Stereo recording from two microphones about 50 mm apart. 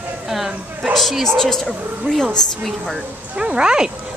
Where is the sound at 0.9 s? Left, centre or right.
Centre.